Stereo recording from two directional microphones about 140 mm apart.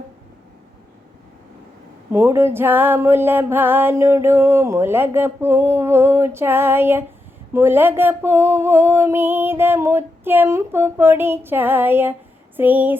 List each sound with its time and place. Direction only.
2.1 s music: 15° right (ahead or behind)